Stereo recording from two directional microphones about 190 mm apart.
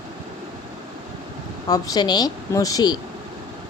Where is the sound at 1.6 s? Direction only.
20° left (ahead or behind).